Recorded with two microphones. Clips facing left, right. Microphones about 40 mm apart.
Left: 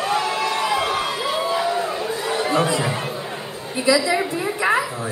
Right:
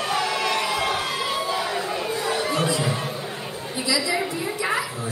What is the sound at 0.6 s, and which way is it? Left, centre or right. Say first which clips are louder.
Crowd: left 3 dB; left.